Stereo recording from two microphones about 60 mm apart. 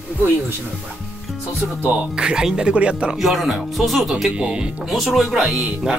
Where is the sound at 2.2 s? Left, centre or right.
Centre.